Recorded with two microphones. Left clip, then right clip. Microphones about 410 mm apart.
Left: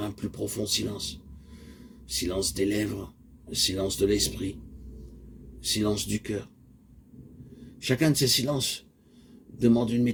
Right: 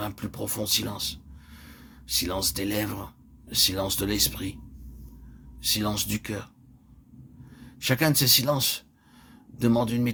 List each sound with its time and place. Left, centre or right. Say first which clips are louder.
0.0 s speech: even; right
5.6 s speech: right 1 dB; right
7.8 s speech: right 1 dB; right